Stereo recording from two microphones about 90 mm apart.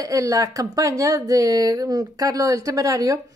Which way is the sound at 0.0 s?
40° right (ahead or behind).